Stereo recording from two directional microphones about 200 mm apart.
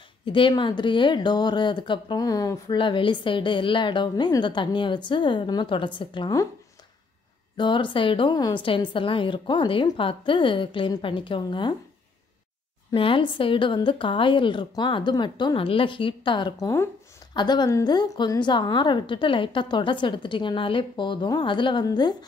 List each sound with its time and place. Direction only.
0.2 s a woman's voice: 25° left (ahead or behind)
7.5 s a woman's voice: 25° left (ahead or behind)
12.9 s a woman's voice: 25° left (ahead or behind)